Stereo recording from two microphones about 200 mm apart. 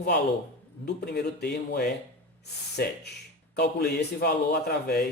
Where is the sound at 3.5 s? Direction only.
50° left (ahead or behind).